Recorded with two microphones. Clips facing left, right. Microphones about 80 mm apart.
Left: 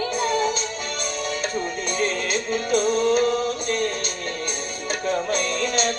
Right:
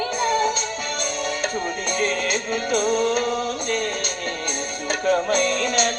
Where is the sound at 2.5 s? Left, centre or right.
Right.